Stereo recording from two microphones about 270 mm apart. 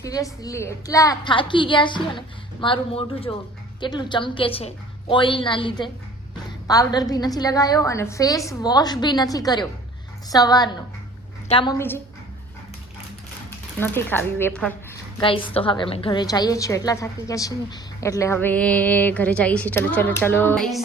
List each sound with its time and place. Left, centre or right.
0.0 s a woman's voice: centre
13.7 s a woman's voice: centre
15.2 s a woman's voice: centre